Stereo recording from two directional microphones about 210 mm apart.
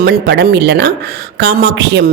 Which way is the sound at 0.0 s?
50° right (ahead or behind).